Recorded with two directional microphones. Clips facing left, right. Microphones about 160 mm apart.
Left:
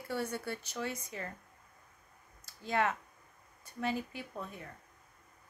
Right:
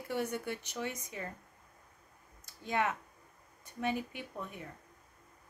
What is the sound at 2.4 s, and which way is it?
A woman's voice, 15° right (ahead or behind).